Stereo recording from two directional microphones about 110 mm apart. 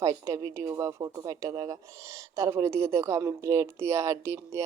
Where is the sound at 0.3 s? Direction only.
30° right (ahead or behind).